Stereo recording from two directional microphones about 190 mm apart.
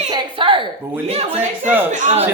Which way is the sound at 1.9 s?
40° right (ahead or behind).